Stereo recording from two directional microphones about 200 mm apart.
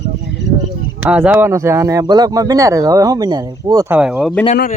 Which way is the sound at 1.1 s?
5° right (ahead or behind).